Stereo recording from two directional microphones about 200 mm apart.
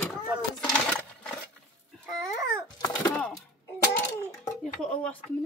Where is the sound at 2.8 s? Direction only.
15° left (ahead or behind).